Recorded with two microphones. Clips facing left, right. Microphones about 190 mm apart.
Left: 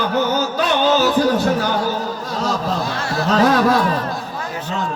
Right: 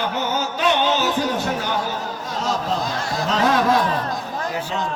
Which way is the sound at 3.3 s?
40° left (ahead or behind).